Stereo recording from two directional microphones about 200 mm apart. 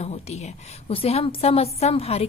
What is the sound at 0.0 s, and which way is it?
A woman's voice, 30° left (ahead or behind).